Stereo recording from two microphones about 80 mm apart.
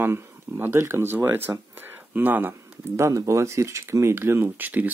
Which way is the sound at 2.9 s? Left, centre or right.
Right.